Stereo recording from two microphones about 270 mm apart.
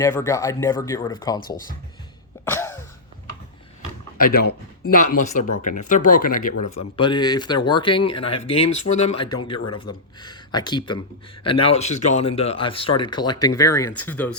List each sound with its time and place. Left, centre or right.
0.0 s speech: centre
1.5 s speech: left
2.4 s cough: centre
4.2 s speech: left; by 14.3 s centre